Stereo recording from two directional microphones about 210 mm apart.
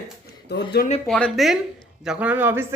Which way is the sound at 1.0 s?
Centre (ahead or behind).